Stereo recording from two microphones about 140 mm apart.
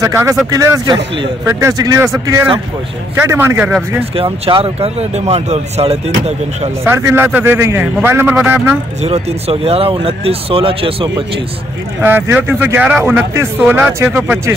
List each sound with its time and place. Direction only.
0.0 s speech: 20° right (ahead or behind)
4.1 s speech: 40° right (ahead or behind)
6.8 s speech: 20° right (ahead or behind)
9.0 s speech: 50° right (ahead or behind)
12.0 s speech: 15° right (ahead or behind)